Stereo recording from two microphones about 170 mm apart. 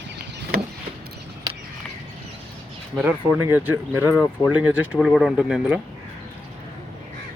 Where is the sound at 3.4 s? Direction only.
10° right (ahead or behind).